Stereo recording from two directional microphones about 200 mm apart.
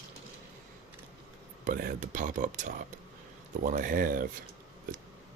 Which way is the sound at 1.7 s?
40° right (ahead or behind).